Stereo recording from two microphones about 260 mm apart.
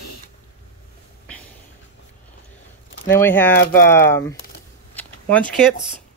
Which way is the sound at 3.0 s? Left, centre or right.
Centre.